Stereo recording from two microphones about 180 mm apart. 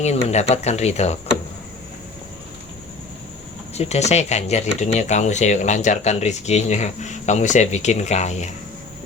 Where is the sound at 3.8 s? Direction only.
35° left (ahead or behind).